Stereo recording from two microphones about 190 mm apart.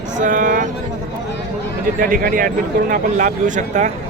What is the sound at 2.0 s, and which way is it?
Speech, 50° right (ahead or behind).